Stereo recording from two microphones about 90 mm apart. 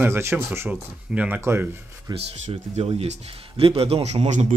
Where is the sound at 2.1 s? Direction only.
90° right.